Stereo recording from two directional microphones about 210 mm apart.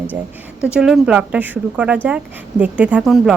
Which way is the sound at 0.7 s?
5° right (ahead or behind).